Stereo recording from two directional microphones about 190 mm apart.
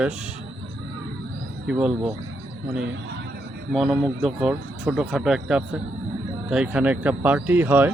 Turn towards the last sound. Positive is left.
turn(degrees=-10)  # may be behind; listen again after turning